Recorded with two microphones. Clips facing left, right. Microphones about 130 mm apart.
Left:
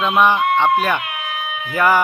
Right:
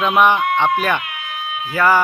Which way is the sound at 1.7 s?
15° left (ahead or behind).